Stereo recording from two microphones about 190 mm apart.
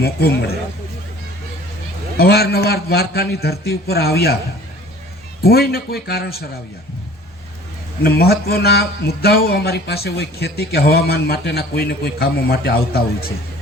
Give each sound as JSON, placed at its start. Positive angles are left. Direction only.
{"t": 0.0, "sound": "speech", "side_deg": 55}
{"t": 2.1, "sound": "speech", "side_deg": 55}
{"t": 5.4, "sound": "speech", "side_deg": 55}
{"t": 8.0, "sound": "speech", "side_deg": 55}